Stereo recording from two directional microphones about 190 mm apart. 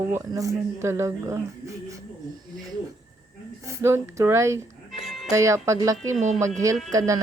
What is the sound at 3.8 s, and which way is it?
Speech, 15° right (ahead or behind).